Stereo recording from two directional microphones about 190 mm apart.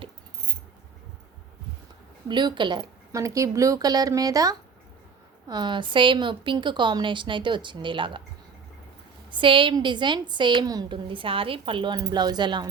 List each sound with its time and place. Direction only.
2.2 s a woman's voice: 25° right (ahead or behind)
9.3 s a woman's voice: 25° right (ahead or behind)